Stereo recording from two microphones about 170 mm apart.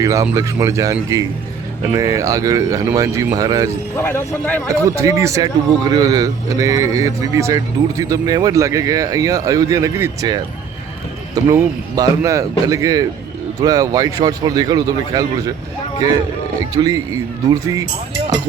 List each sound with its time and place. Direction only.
0.0 s speech: 20° right (ahead or behind)
3.9 s speech: 15° left (ahead or behind)
4.7 s speech: 20° right (ahead or behind)
16.6 s speech: 20° right (ahead or behind)